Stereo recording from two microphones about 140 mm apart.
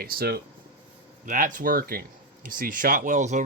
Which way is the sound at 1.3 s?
70° right (ahead or behind).